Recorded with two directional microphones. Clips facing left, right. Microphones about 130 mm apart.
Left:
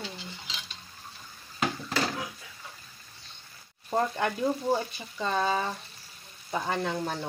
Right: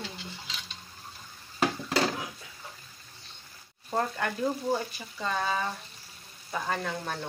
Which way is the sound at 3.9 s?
20° left (ahead or behind).